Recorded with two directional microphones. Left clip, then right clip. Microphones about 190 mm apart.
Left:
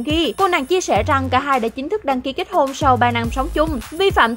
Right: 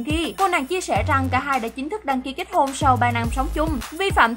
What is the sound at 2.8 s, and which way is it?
Speech, 30° left (ahead or behind).